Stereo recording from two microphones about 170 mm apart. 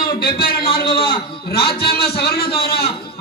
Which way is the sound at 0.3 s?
60° left (ahead or behind).